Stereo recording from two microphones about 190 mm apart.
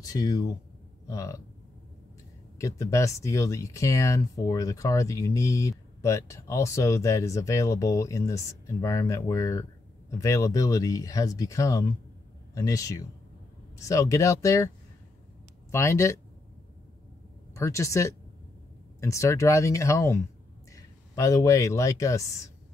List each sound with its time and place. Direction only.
0.0 s speech: 20° left (ahead or behind)
2.6 s speech: 15° left (ahead or behind)
15.7 s speech: 15° left (ahead or behind)
17.6 s speech: 15° left (ahead or behind)